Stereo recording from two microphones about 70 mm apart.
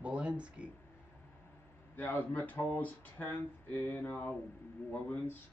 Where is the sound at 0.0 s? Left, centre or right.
Centre.